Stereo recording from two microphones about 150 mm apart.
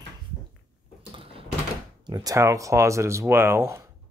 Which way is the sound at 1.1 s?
40° right (ahead or behind).